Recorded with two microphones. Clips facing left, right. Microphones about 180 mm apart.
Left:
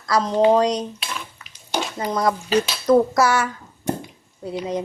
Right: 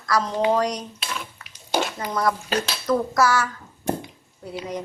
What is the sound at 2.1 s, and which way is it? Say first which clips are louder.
A woman's voice: left 7 dB; 20° left (ahead or behind).